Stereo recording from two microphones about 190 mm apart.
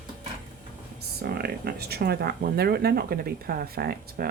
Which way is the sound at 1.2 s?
55° right (ahead or behind).